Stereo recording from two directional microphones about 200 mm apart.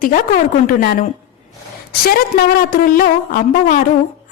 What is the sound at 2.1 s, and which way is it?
A woman's voice, 50° left (ahead or behind).